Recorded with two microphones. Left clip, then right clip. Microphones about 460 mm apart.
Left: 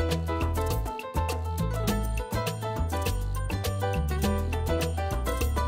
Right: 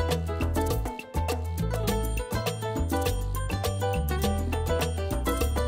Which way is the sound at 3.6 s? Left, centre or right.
Right.